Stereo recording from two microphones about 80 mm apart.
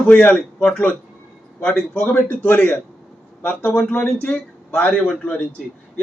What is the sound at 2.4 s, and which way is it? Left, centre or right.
A man's voice, left.